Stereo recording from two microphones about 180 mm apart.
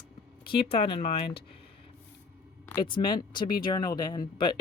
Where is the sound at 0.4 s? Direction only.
30° left (ahead or behind).